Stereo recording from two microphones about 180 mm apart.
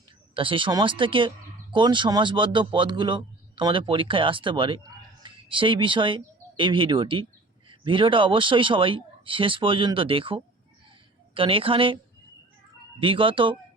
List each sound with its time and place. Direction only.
0.3 s speech: 30° right (ahead or behind)
13.0 s speech: 30° right (ahead or behind)